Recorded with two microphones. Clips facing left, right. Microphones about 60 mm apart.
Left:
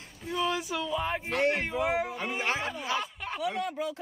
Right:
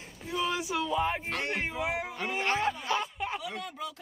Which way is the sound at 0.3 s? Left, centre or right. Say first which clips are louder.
Left 1 dB; centre.